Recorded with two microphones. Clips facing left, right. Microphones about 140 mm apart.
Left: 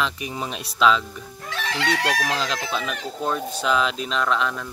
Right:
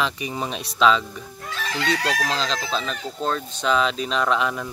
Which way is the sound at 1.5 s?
70° left (ahead or behind).